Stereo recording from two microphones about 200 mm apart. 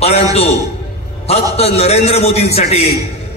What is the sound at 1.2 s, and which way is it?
A man's voice, 30° left (ahead or behind).